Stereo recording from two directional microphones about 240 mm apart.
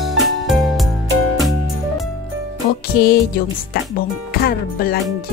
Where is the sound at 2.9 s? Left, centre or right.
Left.